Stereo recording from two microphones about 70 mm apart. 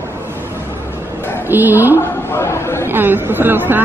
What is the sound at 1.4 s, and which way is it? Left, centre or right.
Speech, right.